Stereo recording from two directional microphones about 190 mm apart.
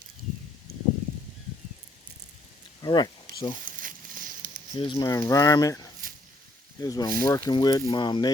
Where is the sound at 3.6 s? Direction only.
45° right (ahead or behind).